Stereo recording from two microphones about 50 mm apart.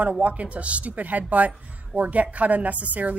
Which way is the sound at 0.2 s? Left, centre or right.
Right.